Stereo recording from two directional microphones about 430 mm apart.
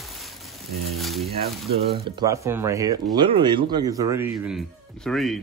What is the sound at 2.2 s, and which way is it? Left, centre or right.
Speech, centre.